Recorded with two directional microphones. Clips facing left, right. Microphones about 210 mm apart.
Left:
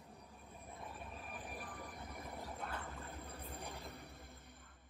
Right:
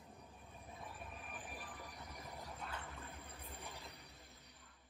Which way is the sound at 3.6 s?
50° left (ahead or behind).